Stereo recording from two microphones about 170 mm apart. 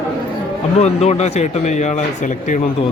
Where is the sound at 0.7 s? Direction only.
40° left (ahead or behind).